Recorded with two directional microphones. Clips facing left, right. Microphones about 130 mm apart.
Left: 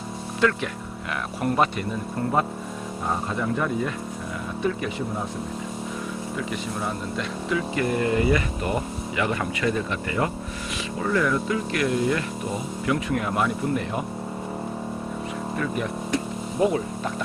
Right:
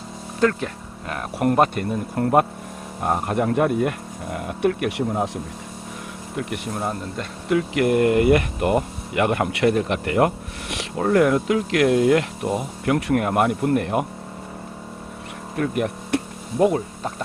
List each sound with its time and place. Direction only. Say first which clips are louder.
0.3 s speech: right 3 dB; 40° right (ahead or behind)
1.4 s speech: right 5 dB; 55° right (ahead or behind); by 5.3 s 75° right (ahead or behind)
6.3 s speech: right 5 dB; 50° right (ahead or behind)
7.8 s speech: right 6 dB; 65° right (ahead or behind); by 12.2 s 90° right
12.8 s speech: right 4 dB; 55° right (ahead or behind)
15.5 s a sound: right 6 dB; 60° right (ahead or behind)